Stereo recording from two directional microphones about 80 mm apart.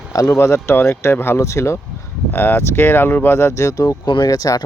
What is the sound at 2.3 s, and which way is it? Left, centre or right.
Speech, left.